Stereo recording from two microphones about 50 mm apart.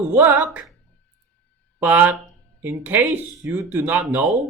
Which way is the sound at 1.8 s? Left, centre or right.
Right.